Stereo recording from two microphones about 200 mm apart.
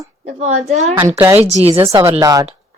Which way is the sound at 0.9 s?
15° right (ahead or behind).